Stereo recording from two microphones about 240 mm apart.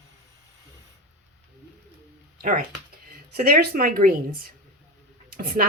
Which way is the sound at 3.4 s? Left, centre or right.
Right.